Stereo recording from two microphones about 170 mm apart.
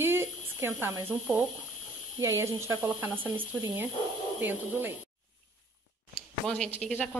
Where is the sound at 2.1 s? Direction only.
15° right (ahead or behind).